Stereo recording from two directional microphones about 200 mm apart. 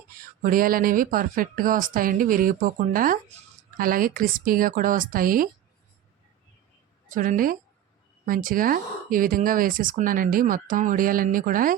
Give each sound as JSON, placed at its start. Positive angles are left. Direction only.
{"t": 0.4, "sound": "speech", "side_deg": -45}
{"t": 7.1, "sound": "speech", "side_deg": -40}